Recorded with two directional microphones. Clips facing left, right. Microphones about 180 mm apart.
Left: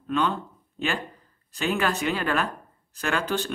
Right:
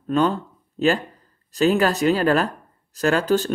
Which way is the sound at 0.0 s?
40° right (ahead or behind).